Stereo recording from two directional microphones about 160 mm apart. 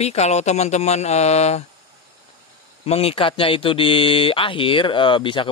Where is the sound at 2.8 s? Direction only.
40° left (ahead or behind).